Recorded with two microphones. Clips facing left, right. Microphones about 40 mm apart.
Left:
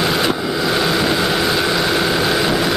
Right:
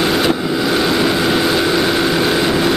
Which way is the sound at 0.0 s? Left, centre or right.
Centre.